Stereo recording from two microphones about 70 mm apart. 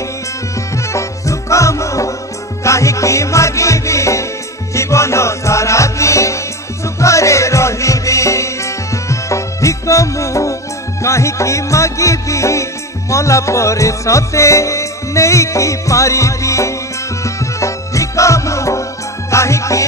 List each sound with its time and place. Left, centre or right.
0.7 s music: left